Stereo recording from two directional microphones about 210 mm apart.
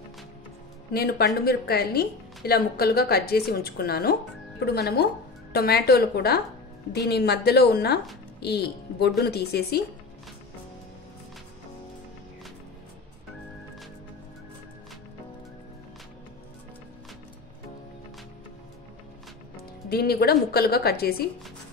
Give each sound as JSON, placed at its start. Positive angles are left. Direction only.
{"t": 0.9, "sound": "a woman's voice", "side_deg": 50}
{"t": 19.9, "sound": "speech", "side_deg": 50}